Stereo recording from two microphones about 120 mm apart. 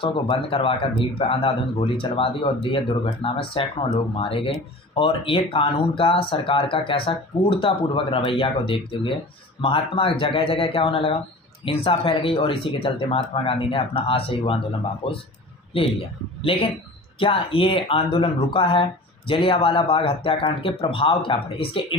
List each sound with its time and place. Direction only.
0.0 s a man's voice: 50° left (ahead or behind)